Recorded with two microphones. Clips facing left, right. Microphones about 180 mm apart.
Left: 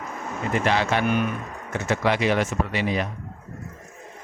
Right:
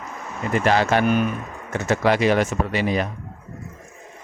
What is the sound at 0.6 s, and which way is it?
Speech, 45° right (ahead or behind).